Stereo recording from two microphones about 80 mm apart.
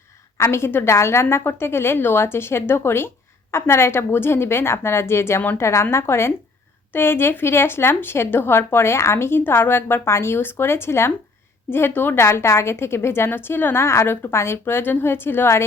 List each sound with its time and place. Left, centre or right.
0.3 s a woman's voice: left